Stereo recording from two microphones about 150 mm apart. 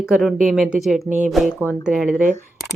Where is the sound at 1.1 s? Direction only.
55° right (ahead or behind).